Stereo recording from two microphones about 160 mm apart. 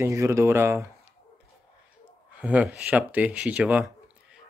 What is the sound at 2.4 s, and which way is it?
Speech, 10° right (ahead or behind).